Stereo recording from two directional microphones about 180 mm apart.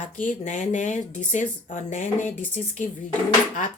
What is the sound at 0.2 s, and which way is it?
Speech, 45° left (ahead or behind).